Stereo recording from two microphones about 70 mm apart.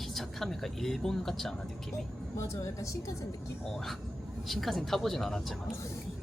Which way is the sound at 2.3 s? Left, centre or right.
Left.